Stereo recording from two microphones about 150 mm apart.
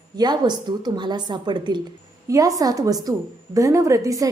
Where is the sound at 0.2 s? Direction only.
30° right (ahead or behind).